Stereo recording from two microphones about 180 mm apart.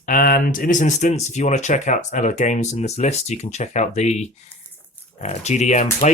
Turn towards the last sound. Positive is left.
turn(degrees=40)  # may be behind; listen again after turning